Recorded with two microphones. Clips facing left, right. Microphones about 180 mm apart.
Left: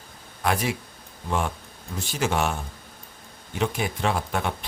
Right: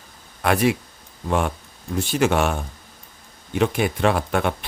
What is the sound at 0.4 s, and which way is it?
Speech, 65° right (ahead or behind).